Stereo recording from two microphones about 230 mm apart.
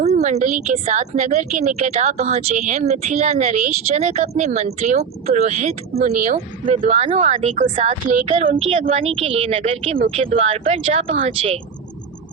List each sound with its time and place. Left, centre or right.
0.0 s a woman's voice: right